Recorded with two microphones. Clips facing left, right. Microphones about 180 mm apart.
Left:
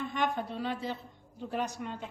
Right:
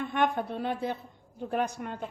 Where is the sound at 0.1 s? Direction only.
55° right (ahead or behind).